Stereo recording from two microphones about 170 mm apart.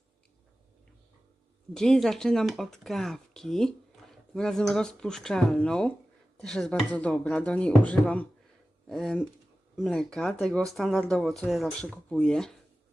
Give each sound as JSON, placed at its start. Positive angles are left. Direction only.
{"t": 1.7, "sound": "speech", "side_deg": 5}